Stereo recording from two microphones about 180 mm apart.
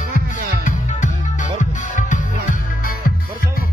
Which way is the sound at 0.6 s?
45° left (ahead or behind).